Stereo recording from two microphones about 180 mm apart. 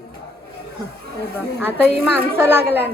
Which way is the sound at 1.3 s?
10° right (ahead or behind).